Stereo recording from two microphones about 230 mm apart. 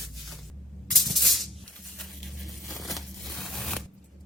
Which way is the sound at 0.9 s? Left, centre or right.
Centre.